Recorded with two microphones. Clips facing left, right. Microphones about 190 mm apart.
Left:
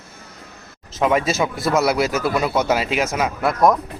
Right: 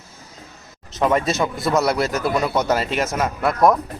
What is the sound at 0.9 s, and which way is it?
Speech, centre (ahead or behind).